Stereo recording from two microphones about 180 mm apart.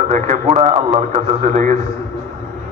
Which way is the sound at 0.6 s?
35° right (ahead or behind).